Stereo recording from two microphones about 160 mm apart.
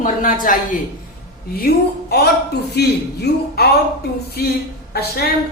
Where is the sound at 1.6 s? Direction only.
85° left.